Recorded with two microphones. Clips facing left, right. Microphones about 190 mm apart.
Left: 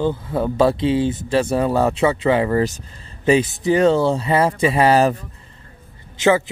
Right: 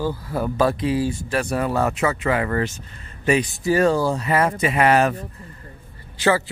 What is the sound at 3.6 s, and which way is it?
Speech, 20° left (ahead or behind).